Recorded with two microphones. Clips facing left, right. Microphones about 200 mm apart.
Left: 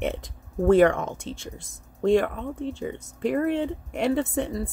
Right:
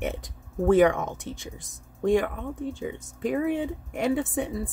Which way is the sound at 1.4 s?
15° right (ahead or behind).